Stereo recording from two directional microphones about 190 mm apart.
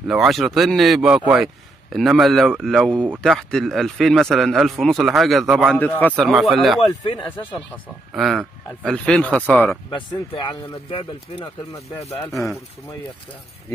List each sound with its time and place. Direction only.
0.1 s a man's voice: centre (ahead or behind)
6.9 s speech: 25° left (ahead or behind)
8.1 s a man's voice: centre (ahead or behind)
9.8 s speech: 25° left (ahead or behind)
12.3 s a man's voice: centre (ahead or behind)